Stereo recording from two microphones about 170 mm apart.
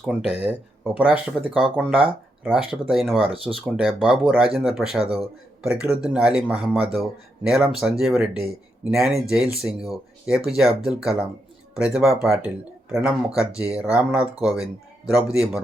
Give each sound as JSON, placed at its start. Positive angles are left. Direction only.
{"t": 0.0, "sound": "speech", "side_deg": -5}
{"t": 3.2, "sound": "speech", "side_deg": -30}
{"t": 3.5, "sound": "speech", "side_deg": -5}
{"t": 5.0, "sound": "speech", "side_deg": -30}
{"t": 5.6, "sound": "speech", "side_deg": -5}